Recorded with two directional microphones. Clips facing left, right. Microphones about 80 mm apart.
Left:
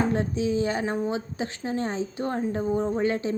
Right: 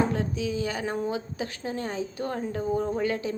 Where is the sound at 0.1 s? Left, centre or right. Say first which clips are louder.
Left 4 dB; left.